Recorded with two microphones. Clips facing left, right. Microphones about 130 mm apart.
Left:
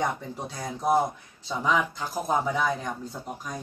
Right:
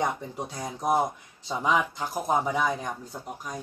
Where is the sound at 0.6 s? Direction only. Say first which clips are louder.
Left 1 dB; 15° right (ahead or behind).